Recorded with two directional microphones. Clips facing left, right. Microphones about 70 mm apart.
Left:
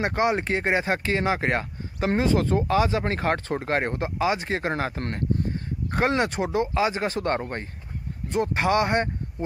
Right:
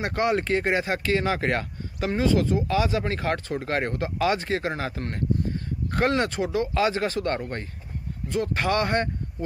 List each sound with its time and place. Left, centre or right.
0.0 s speech: left